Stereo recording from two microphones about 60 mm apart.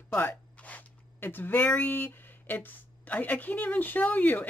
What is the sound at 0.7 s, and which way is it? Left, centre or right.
Zipper, left.